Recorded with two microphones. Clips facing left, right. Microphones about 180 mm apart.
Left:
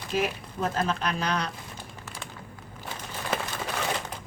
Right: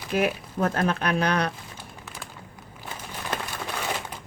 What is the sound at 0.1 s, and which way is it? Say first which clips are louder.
A woman's voice: right 4 dB; 60° right (ahead or behind).